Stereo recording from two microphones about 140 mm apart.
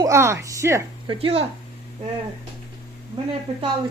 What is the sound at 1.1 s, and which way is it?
Speech, 45° right (ahead or behind).